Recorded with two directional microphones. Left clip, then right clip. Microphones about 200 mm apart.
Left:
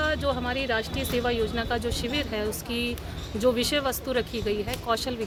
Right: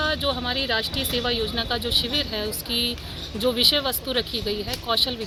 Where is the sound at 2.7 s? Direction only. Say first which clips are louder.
Right 9 dB; 35° left (ahead or behind).